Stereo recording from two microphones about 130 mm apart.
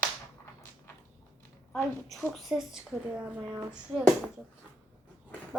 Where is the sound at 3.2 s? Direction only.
15° right (ahead or behind).